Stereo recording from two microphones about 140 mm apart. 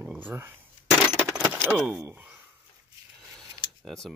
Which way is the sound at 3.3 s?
5° left (ahead or behind).